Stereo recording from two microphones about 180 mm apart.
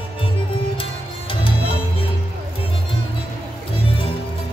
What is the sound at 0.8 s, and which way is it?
Music, 30° left (ahead or behind).